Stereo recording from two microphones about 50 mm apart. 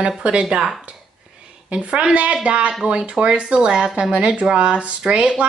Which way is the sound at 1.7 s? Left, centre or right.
Right.